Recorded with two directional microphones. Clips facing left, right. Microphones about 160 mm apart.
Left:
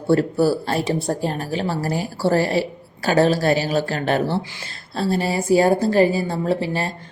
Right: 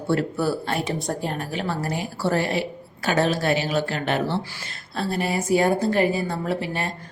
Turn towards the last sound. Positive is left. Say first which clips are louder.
# left 4 dB
turn(degrees=30)  # may be behind; listen again after turning